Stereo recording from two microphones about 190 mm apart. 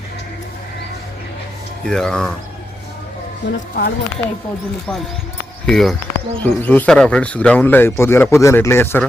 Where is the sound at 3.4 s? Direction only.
55° left (ahead or behind).